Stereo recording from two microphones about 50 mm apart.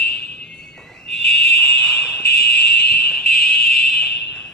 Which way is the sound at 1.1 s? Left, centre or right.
Centre.